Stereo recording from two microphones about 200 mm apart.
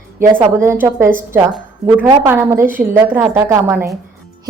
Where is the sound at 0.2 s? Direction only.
10° right (ahead or behind).